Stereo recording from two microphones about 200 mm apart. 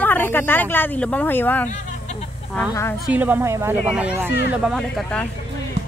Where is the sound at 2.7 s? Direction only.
15° left (ahead or behind).